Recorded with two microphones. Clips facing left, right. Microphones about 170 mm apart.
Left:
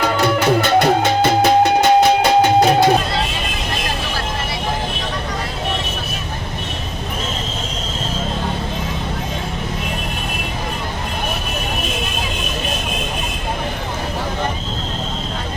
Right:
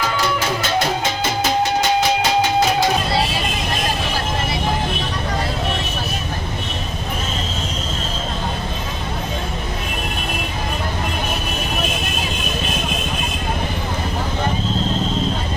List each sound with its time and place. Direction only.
0.0 s music: 60° left (ahead or behind)